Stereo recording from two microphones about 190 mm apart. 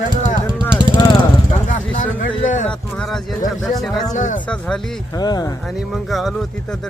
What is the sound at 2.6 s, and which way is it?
Speech, 5° left (ahead or behind).